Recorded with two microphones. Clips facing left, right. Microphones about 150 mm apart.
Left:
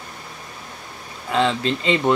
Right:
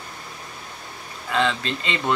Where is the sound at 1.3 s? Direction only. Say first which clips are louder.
Left 3 dB; 25° left (ahead or behind).